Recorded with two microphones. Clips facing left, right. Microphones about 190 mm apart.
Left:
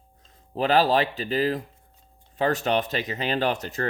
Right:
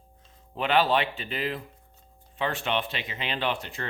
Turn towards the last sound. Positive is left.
turn(degrees=40)  # may be behind; listen again after turning